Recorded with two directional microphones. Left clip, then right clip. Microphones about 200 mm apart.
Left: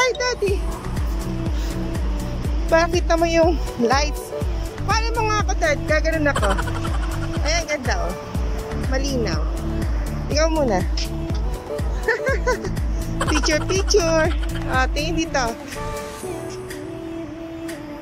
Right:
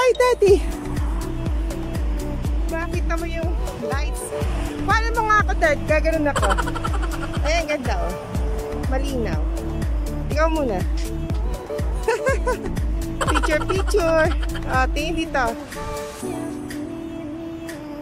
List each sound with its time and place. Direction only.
0.2 s music: 25° right (ahead or behind)
2.7 s music: 25° left (ahead or behind)
4.8 s speech: 5° left (ahead or behind)
11.7 s music: 5° right (ahead or behind)
13.2 s speech: centre (ahead or behind)